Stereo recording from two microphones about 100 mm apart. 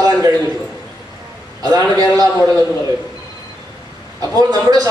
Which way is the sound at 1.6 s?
40° right (ahead or behind).